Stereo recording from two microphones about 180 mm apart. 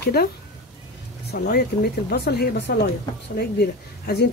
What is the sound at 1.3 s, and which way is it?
Speech, 60° left (ahead or behind).